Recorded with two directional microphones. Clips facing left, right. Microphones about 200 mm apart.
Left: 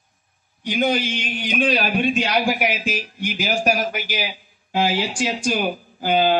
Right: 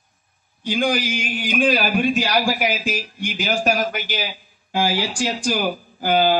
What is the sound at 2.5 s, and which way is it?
Speech, 35° right (ahead or behind).